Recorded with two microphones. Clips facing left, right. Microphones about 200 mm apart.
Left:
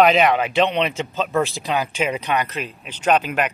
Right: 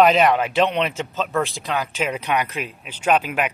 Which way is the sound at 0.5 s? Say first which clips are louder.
Left 1 dB; 5° right (ahead or behind).